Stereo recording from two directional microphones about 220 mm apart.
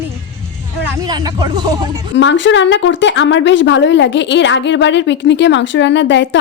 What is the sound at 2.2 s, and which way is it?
A woman's voice, 55° left (ahead or behind).